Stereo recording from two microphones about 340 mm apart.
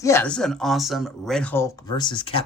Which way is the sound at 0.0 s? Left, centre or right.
Centre.